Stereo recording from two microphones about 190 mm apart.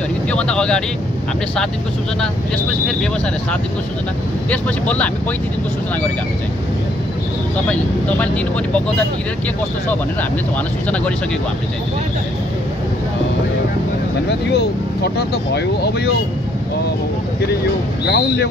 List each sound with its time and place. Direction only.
0.3 s speech: 5° left (ahead or behind)
4.5 s speech: 5° left (ahead or behind)
7.6 s speech: 5° left (ahead or behind)
14.5 s speech: 60° left (ahead or behind)
18.0 s speech: 60° left (ahead or behind)